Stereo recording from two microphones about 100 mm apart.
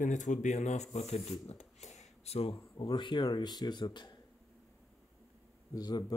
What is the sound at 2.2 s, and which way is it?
Speech, 90° left.